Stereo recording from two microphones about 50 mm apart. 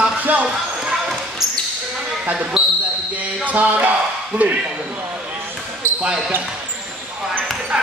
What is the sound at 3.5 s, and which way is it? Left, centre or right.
Speech, right.